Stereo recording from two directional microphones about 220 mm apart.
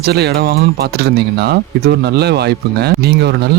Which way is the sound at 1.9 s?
50° right (ahead or behind).